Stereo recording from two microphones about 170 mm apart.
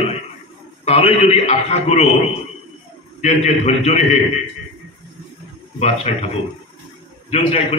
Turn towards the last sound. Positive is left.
turn(degrees=35)  # may be behind; listen again after turning